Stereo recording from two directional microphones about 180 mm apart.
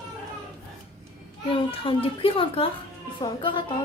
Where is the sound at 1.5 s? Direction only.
30° left (ahead or behind).